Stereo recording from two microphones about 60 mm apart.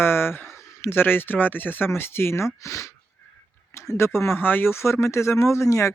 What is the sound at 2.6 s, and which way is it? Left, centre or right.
Speech, left.